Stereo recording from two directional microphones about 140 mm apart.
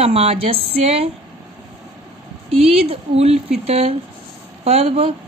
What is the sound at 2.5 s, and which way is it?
Speech, 45° right (ahead or behind).